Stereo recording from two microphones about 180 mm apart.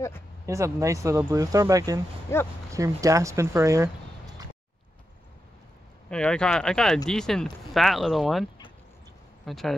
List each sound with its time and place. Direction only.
0.5 s speech: 15° right (ahead or behind)
2.3 s speech: 15° left (ahead or behind)
2.7 s speech: 20° right (ahead or behind)
6.0 s speech: 5° left (ahead or behind)
9.5 s speech: centre (ahead or behind)